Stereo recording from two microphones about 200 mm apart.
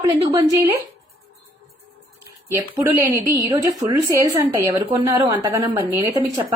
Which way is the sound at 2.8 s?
15° right (ahead or behind).